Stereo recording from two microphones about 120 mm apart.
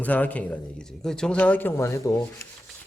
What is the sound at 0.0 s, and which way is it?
A man's voice, 15° left (ahead or behind).